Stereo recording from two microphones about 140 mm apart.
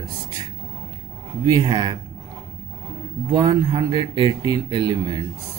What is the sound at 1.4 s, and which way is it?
Speech, 35° right (ahead or behind).